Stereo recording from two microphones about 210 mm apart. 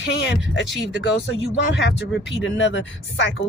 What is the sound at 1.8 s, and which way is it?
Speech, 55° left (ahead or behind).